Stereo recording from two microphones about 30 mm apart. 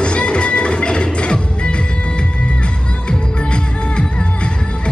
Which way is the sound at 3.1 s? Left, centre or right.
Left.